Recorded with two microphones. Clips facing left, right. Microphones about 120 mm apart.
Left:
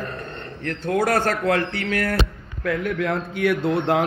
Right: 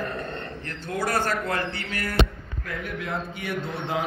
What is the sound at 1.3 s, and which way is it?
A man's voice, 75° left (ahead or behind).